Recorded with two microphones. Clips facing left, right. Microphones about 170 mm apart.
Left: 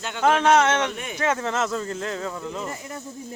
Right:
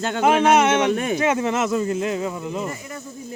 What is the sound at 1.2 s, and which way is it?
Speech, 15° right (ahead or behind).